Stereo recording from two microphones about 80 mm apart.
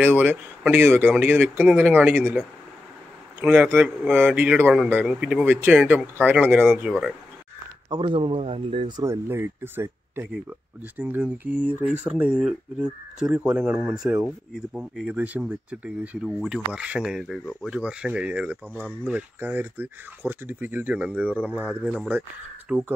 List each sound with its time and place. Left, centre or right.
0.0 s speech: right
3.3 s a man's voice: centre
5.0 s speech: centre
5.4 s speech: right
6.8 s speech: centre
7.9 s speech: right
9.0 s speech: right; by 18.6 s centre
18.7 s speech: centre
19.0 s speech: centre
22.7 s speech: centre